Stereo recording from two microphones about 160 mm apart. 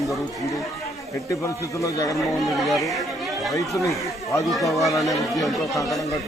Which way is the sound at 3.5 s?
20° left (ahead or behind).